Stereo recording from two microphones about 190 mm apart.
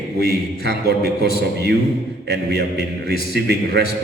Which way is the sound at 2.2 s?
60° right (ahead or behind).